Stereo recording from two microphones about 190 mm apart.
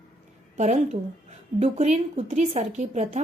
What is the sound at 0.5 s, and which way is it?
A woman's voice, 35° right (ahead or behind).